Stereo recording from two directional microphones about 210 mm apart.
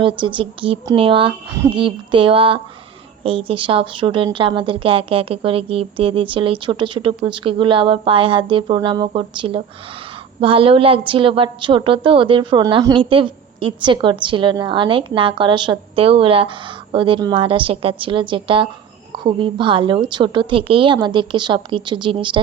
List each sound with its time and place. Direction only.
0.0 s a woman's voice: 25° right (ahead or behind)